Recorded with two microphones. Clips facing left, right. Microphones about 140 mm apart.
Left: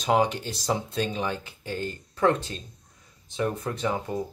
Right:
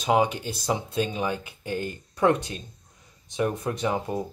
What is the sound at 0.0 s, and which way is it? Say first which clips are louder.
Speech: right 1 dB; 5° right (ahead or behind).